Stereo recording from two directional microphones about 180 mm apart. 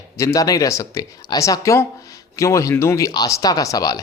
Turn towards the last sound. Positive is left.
turn(degrees=20)  # may be behind; listen again after turning